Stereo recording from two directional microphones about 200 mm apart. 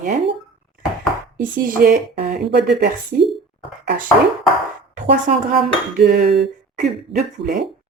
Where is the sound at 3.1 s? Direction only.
40° right (ahead or behind).